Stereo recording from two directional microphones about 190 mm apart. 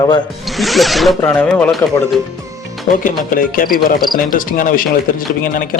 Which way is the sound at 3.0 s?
50° left (ahead or behind).